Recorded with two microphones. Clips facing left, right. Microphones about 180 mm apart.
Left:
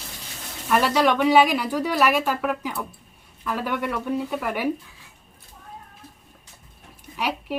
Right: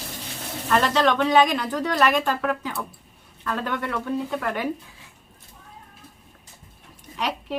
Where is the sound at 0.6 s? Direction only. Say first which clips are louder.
Left 1 dB; 10° left (ahead or behind).